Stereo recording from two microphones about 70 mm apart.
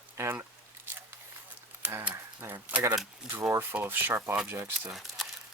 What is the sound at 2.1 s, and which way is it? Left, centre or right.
Speech, right.